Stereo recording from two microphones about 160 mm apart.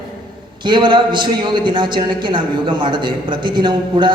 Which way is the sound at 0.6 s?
30° right (ahead or behind).